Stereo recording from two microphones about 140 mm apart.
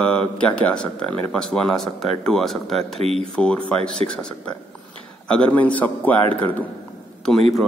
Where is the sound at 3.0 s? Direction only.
45° right (ahead or behind).